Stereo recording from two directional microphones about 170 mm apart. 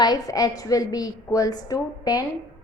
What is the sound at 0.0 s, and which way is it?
A woman's voice, 25° left (ahead or behind).